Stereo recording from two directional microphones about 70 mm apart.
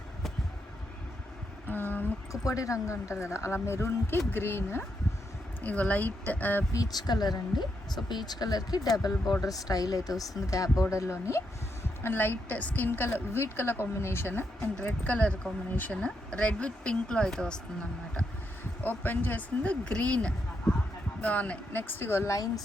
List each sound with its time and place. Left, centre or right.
1.6 s a sound: left
2.3 s a woman's voice: left
5.6 s speech: left
6.7 s speech: left
8.1 s speech: left
12.0 s speech: left
14.8 s speech: left
18.8 s speech: left